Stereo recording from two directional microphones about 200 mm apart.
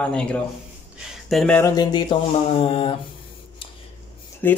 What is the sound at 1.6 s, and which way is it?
Mantra, 20° left (ahead or behind).